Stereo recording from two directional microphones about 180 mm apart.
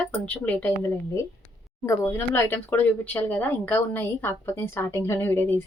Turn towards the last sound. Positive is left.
turn(degrees=10)  # may be behind; listen again after turning